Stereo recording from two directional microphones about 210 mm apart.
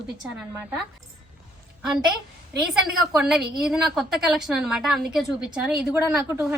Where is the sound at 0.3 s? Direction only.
5° right (ahead or behind).